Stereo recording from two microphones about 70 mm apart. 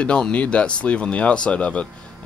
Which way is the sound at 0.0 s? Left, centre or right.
Centre.